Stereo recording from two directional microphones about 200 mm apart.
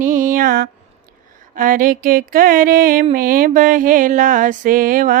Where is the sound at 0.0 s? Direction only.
40° right (ahead or behind).